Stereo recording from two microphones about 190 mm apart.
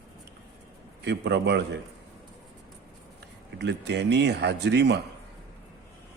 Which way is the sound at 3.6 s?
60° right (ahead or behind).